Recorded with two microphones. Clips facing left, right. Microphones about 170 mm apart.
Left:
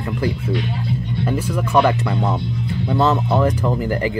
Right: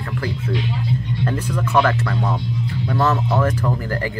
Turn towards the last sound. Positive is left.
turn(degrees=15)  # may be behind; listen again after turning